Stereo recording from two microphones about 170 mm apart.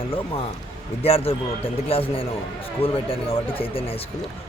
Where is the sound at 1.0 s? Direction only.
35° left (ahead or behind).